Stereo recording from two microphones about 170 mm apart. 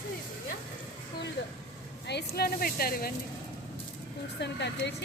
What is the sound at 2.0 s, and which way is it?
A woman's voice, 70° left (ahead or behind).